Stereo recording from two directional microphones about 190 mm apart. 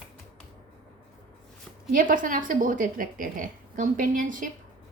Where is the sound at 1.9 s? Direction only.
45° right (ahead or behind).